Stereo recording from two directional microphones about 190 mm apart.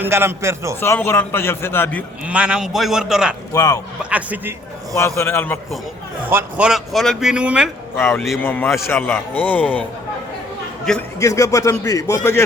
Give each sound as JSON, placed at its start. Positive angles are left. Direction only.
{"t": 0.0, "sound": "a man's voice", "side_deg": -15}
{"t": 0.8, "sound": "a man's voice", "side_deg": 10}
{"t": 2.2, "sound": "a man's voice", "side_deg": -5}
{"t": 3.5, "sound": "speech", "side_deg": 20}
{"t": 4.1, "sound": "a man's voice", "side_deg": -10}
{"t": 4.9, "sound": "a man's voice", "side_deg": 15}
{"t": 6.2, "sound": "a man's voice", "side_deg": -5}
{"t": 7.9, "sound": "a man's voice", "side_deg": 10}
{"t": 11.2, "sound": "a man's voice", "side_deg": 15}